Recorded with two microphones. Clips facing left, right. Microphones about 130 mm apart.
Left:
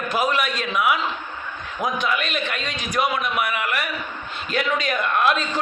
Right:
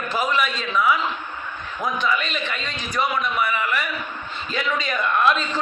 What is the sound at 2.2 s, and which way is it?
Speech, 65° left (ahead or behind).